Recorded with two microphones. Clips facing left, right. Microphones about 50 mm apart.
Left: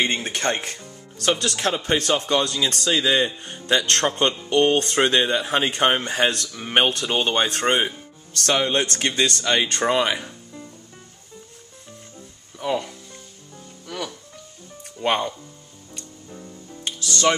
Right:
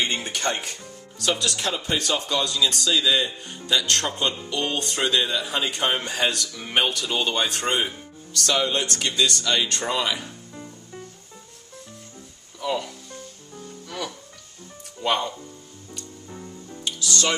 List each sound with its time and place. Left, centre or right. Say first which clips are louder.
0.2 s a man's voice: left 2 dB; left
0.6 s music: left 2 dB; left
1.4 s a man's voice: left 3 dB; left
12.5 s speech: left 2 dB; left
15.0 s speech: left 2 dB; left
16.8 s music: left 3 dB; left